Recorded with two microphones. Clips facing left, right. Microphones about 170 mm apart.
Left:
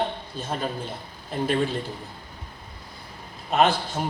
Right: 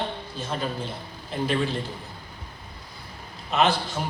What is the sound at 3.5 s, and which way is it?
Speech, 50° left (ahead or behind).